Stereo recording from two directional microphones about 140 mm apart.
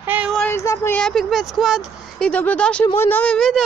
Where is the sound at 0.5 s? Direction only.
15° left (ahead or behind).